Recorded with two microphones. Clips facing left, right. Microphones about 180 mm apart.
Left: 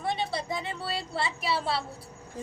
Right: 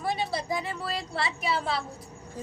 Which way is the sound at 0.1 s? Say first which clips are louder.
Right 1 dB; 5° right (ahead or behind).